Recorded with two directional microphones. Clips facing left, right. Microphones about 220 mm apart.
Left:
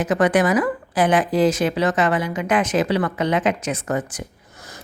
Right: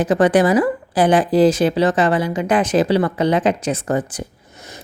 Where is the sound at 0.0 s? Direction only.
30° right (ahead or behind).